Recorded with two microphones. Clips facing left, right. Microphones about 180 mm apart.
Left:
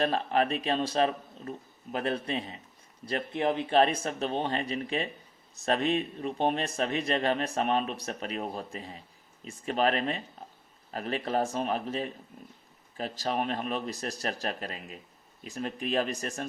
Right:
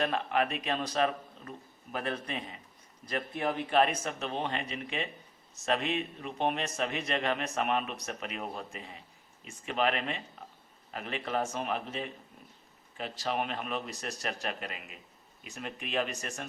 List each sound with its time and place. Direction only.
0.0 s speech: 35° left (ahead or behind)